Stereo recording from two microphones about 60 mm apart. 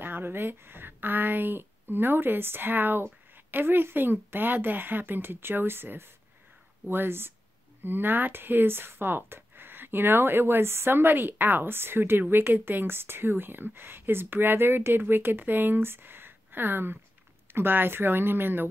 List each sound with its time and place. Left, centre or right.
0.0 s speech: right